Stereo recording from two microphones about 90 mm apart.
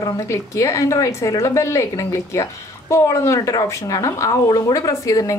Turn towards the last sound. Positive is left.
turn(degrees=40)  # may be behind; listen again after turning